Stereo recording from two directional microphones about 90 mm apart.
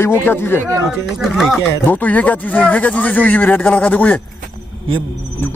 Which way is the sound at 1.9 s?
20° left (ahead or behind).